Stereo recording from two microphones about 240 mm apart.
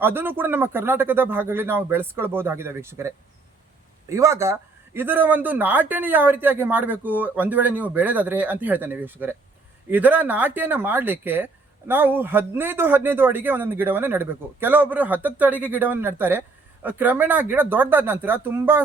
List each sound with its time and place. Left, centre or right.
0.0 s speech: centre
4.1 s speech: centre